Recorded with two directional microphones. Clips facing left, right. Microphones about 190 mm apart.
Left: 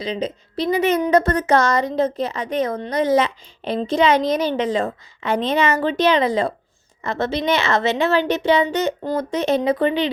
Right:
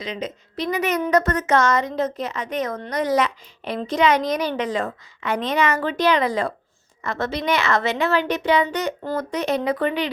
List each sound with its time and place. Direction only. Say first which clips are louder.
0.0 s a woman's voice: left 5 dB; 30° left (ahead or behind)